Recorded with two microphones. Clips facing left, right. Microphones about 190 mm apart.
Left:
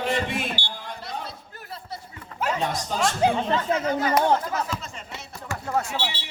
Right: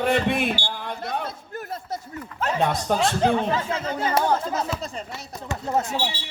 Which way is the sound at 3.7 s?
30° right (ahead or behind).